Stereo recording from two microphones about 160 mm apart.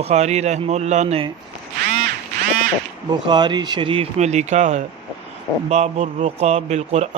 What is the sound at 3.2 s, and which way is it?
Speech, 30° right (ahead or behind).